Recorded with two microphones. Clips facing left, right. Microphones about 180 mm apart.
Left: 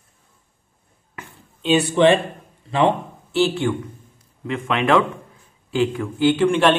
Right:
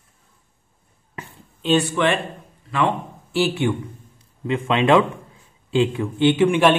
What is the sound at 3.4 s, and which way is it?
A man's voice, 20° right (ahead or behind).